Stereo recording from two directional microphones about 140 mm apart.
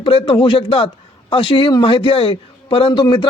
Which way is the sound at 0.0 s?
40° left (ahead or behind).